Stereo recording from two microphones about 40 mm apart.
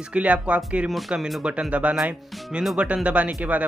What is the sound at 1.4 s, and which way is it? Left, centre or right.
Speech, right.